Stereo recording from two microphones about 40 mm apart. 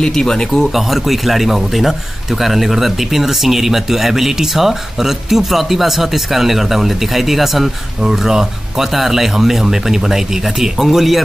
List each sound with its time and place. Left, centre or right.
0.0 s speech: centre
0.7 s a man's voice: centre